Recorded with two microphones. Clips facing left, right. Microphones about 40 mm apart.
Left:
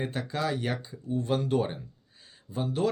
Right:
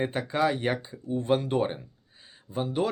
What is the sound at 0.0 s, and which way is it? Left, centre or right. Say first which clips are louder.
Speech: right 5 dB; right.